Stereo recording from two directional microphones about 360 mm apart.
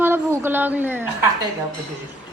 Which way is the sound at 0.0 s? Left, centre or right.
Centre.